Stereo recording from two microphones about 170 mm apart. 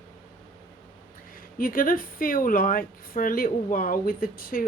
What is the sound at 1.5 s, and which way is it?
Speech, 55° left (ahead or behind).